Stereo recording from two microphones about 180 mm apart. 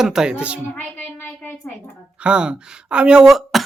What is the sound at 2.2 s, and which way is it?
Speech, 5° right (ahead or behind).